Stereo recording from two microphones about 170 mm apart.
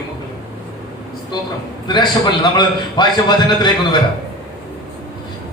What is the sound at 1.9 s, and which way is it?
A man's voice, 25° left (ahead or behind).